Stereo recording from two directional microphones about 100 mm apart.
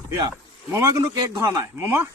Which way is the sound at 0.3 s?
30° right (ahead or behind).